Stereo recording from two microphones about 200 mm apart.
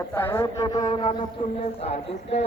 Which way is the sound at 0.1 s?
10° left (ahead or behind).